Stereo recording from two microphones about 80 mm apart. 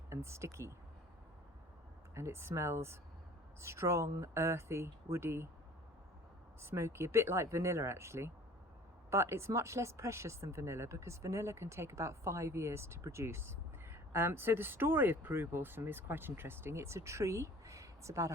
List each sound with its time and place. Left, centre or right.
0.1 s speech: right
2.1 s speech: right
6.6 s speech: right